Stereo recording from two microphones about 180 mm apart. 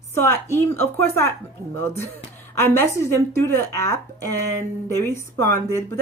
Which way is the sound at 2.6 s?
15° left (ahead or behind).